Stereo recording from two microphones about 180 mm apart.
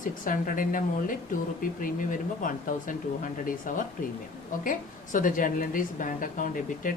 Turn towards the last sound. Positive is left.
turn(degrees=50)  # may be behind; listen again after turning